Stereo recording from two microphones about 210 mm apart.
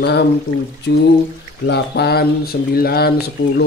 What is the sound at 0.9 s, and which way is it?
Speech, 55° left (ahead or behind).